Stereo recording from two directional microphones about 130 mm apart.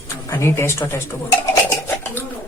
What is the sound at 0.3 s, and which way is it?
Speech, 20° left (ahead or behind).